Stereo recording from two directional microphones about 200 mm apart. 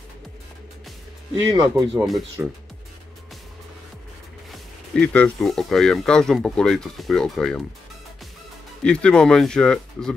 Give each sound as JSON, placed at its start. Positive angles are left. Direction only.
{"t": 1.3, "sound": "speech", "side_deg": -20}
{"t": 4.9, "sound": "speech", "side_deg": 5}
{"t": 8.8, "sound": "speech", "side_deg": 5}